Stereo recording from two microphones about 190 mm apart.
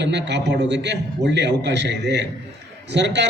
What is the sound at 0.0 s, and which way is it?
A man's voice, 65° right (ahead or behind).